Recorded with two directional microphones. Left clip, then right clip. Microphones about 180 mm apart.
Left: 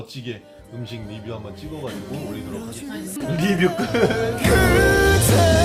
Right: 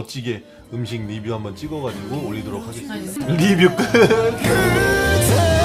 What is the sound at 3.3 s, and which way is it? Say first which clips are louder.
Speech: right 5 dB; 25° right (ahead or behind).